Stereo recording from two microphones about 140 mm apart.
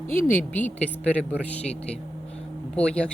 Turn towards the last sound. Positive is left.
turn(degrees=5)  # may be behind; listen again after turning